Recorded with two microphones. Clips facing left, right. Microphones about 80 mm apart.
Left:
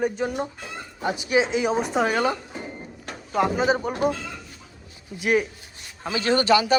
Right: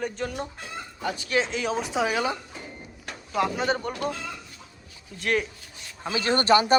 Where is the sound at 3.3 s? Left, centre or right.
Centre.